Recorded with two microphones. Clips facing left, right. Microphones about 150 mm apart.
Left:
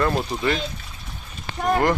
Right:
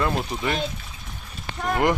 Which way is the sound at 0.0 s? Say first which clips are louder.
Left 3 dB; 5° right (ahead or behind).